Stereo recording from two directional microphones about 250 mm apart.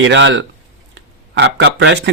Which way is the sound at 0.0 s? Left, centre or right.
Right.